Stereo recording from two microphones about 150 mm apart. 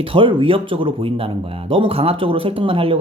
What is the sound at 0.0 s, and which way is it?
Speech, 35° right (ahead or behind).